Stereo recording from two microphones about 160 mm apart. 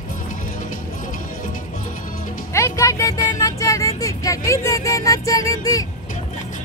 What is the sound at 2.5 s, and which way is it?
Vehicle, 15° left (ahead or behind).